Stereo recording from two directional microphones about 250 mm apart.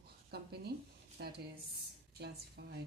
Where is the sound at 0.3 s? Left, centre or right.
Right.